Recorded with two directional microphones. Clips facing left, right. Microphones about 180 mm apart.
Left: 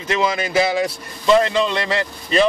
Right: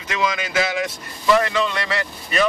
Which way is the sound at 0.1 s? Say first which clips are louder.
Left 4 dB; 30° left (ahead or behind).